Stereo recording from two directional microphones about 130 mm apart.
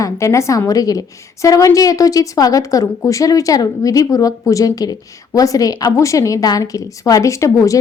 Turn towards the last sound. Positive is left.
turn(degrees=25)  # may be behind; listen again after turning